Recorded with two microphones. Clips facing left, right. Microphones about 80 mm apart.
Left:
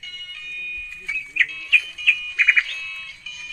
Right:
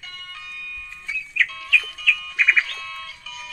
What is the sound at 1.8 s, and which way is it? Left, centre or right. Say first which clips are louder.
Music: even; right.